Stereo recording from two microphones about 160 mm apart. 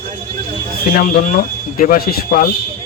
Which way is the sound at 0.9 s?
55° left (ahead or behind).